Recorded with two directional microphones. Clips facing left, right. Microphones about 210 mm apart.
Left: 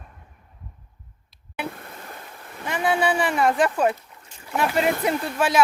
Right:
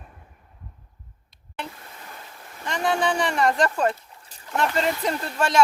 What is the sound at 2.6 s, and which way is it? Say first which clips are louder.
Speech: left 1 dB; 5° left (ahead or behind).